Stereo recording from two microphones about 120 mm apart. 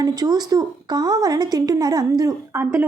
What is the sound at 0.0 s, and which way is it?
A woman's voice, 35° right (ahead or behind).